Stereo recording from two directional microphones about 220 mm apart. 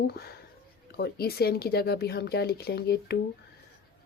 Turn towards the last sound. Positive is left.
turn(degrees=45)  # may be behind; listen again after turning